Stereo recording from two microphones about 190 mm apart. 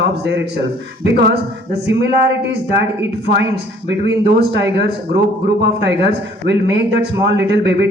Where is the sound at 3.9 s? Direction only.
60° right (ahead or behind).